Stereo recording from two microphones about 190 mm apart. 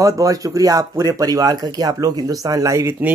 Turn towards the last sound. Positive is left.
turn(degrees=-15)  # may be behind; listen again after turning